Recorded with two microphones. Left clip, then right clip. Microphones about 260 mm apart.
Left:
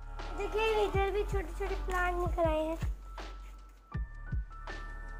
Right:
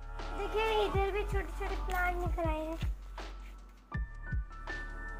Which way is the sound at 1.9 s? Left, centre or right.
Left.